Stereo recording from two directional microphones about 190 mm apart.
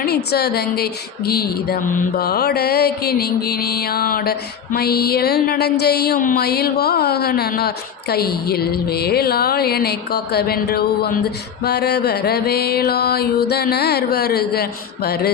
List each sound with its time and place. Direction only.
0.0 s mantra: 55° left (ahead or behind)